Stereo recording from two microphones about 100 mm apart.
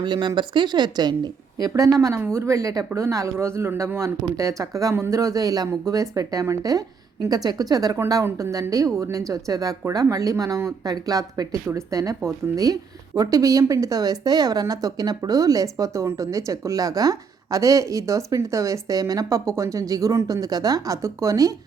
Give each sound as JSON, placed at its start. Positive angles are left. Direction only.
{"t": 0.0, "sound": "a woman's voice", "side_deg": -50}